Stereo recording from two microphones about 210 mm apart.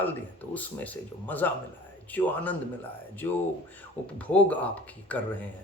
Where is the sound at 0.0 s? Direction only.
10° left (ahead or behind).